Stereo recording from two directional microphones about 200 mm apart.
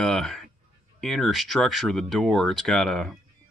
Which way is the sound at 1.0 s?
Centre (ahead or behind).